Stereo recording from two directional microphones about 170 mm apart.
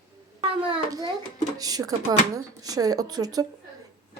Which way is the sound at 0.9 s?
20° right (ahead or behind).